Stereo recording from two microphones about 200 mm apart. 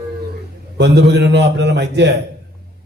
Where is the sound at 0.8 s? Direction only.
60° right (ahead or behind).